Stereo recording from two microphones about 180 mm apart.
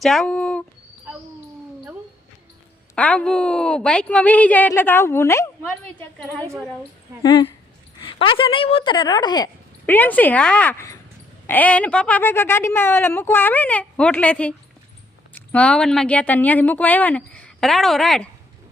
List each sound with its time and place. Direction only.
0.0 s speech: centre (ahead or behind)
2.9 s a woman's voice: 5° left (ahead or behind)
7.2 s speech: 25° left (ahead or behind)
9.8 s a woman's voice: 10° left (ahead or behind)